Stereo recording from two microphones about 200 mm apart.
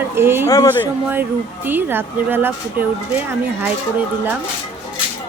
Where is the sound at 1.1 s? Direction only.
10° right (ahead or behind).